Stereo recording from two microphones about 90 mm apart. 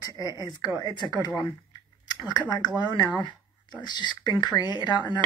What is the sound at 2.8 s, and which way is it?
Speech, 55° left (ahead or behind).